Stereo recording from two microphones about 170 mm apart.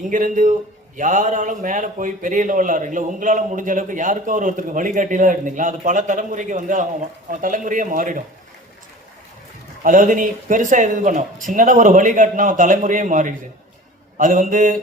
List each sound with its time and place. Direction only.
0.0 s a man's voice: 50° right (ahead or behind)
9.8 s a man's voice: 50° right (ahead or behind)